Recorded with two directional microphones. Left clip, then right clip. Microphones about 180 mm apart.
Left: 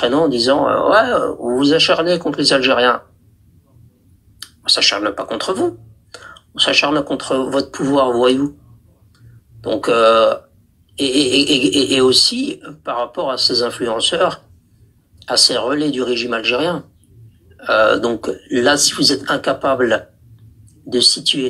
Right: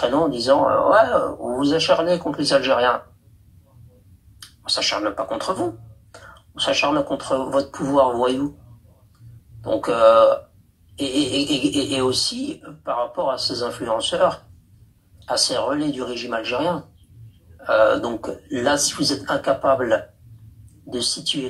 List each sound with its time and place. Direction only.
0.0 s speech: 25° left (ahead or behind)
4.6 s speech: 25° left (ahead or behind)
9.8 s speech: 30° left (ahead or behind)